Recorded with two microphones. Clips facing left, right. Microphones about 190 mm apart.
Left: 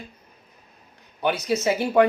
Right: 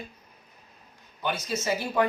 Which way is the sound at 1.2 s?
65° left (ahead or behind).